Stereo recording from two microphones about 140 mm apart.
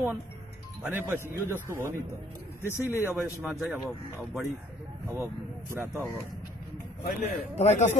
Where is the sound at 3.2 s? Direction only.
10° right (ahead or behind).